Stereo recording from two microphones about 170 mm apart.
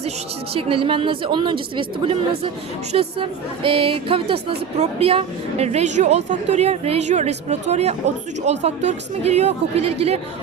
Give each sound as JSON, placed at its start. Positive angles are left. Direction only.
{"t": 0.5, "sound": "speech", "side_deg": -30}